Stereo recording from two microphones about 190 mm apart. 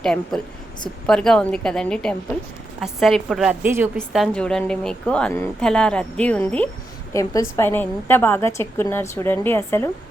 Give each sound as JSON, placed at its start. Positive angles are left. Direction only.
{"t": 0.0, "sound": "a woman's voice", "side_deg": 5}